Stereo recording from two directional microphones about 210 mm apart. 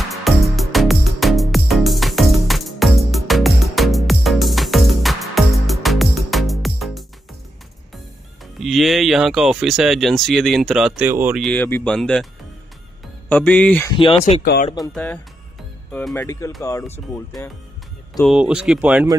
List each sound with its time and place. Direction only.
0.3 s music: centre (ahead or behind)
8.5 s speech: centre (ahead or behind)
13.3 s speech: 5° left (ahead or behind)
13.9 s speech: 25° left (ahead or behind)
14.4 s speech: 45° left (ahead or behind)
15.9 s speech: 5° left (ahead or behind)
18.2 s speech: 5° right (ahead or behind)